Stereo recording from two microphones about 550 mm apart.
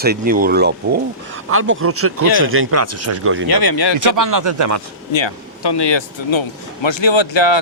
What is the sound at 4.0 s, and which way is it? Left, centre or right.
Speech, right.